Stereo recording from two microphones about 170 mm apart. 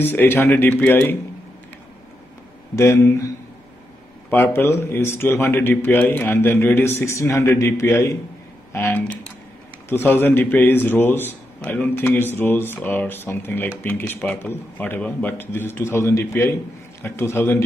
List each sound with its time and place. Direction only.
0.0 s speech: 10° left (ahead or behind)
2.7 s speech: 15° left (ahead or behind)
4.3 s speech: 10° left (ahead or behind)